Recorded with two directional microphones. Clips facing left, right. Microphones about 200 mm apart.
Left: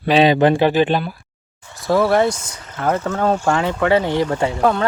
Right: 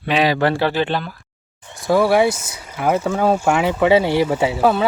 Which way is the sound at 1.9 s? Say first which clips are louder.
Right 1 dB; centre (ahead or behind).